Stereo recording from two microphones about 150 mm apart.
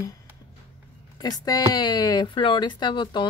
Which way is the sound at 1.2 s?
25° left (ahead or behind).